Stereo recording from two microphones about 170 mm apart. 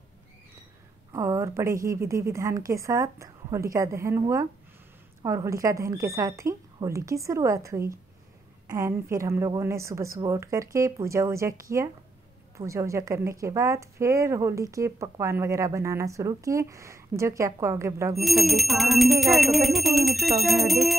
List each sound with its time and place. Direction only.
1.1 s a woman's voice: 20° right (ahead or behind)
18.1 s speech: centre (ahead or behind)